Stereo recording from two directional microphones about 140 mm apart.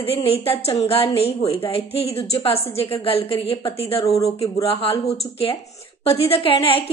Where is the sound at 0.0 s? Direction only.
45° left (ahead or behind).